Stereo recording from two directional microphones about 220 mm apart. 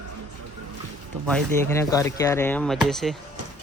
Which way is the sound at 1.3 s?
10° left (ahead or behind).